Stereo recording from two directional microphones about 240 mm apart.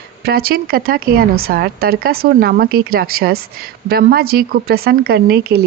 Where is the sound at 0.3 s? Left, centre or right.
Right.